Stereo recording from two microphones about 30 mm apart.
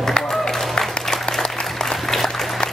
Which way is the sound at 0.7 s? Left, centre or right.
Centre.